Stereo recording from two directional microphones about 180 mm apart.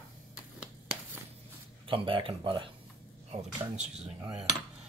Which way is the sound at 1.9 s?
30° right (ahead or behind).